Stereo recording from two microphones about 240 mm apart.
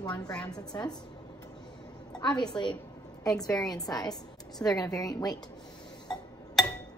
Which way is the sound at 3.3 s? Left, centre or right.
Centre.